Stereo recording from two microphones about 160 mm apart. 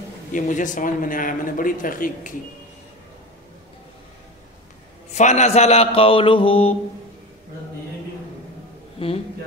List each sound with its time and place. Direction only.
0.3 s a man's voice: 50° left (ahead or behind)
5.1 s mantra: 45° left (ahead or behind)
9.0 s mantra: 35° left (ahead or behind)